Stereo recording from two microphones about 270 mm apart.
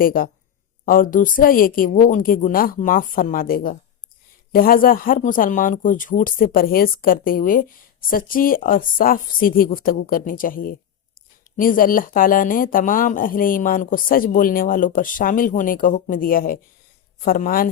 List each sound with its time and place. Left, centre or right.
0.0 s speech: left